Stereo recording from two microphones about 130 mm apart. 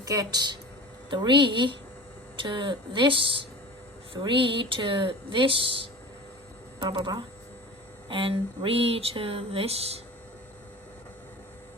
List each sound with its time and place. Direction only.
0.0 s speech: 30° right (ahead or behind)
8.1 s speech: 45° right (ahead or behind)